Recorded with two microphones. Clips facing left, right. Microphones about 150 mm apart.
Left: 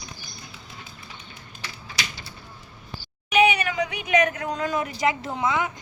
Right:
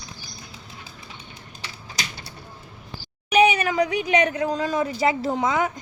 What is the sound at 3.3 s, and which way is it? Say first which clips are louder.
Speech: right 2 dB; 40° right (ahead or behind).